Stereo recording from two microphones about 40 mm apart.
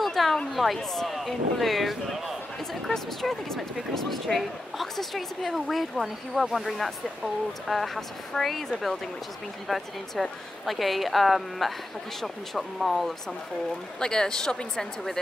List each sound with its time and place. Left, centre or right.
0.0 s a sound: centre
0.5 s speech: centre
2.9 s speech: centre
7.6 s speech: centre
13.9 s a woman's voice: centre